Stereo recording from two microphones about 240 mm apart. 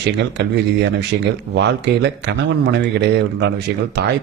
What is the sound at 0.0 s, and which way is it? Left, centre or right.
Speech, right.